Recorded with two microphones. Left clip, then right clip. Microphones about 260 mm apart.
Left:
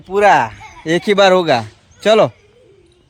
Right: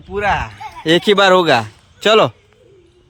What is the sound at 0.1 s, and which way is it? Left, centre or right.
Speech, left.